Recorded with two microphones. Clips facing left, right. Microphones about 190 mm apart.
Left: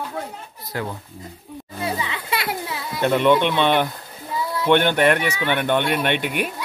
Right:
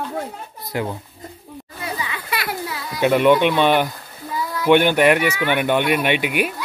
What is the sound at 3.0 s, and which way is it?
Speech, 10° right (ahead or behind).